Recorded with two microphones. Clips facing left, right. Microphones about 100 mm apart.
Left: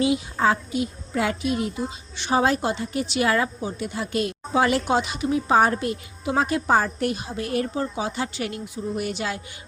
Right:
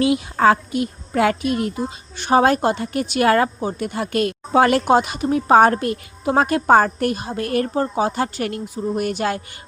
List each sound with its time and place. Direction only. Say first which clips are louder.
0.0 s a woman's voice: right 5 dB; 65° right (ahead or behind)